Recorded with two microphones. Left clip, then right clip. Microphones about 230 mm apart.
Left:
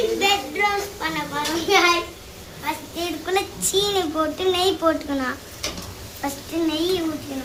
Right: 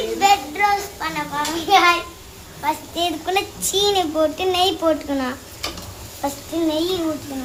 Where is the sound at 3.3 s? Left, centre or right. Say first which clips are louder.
Right 1 dB; centre.